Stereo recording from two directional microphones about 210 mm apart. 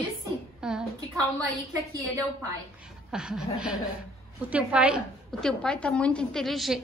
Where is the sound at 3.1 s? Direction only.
5° right (ahead or behind).